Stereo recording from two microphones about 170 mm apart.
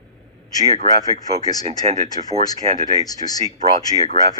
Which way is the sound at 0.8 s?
20° left (ahead or behind).